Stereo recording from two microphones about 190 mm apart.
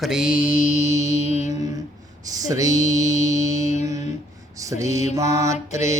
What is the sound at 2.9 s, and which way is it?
Music, 35° left (ahead or behind).